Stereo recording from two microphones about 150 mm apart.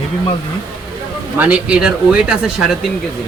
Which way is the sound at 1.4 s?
10° right (ahead or behind).